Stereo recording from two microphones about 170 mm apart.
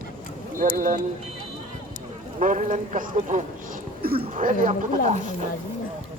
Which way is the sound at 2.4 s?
45° right (ahead or behind).